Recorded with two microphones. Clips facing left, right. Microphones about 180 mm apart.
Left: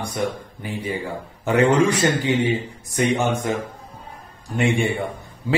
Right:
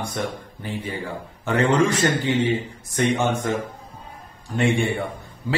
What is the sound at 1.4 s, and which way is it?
Speech, 15° left (ahead or behind).